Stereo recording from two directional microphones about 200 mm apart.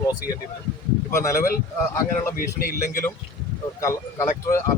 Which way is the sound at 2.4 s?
45° left (ahead or behind).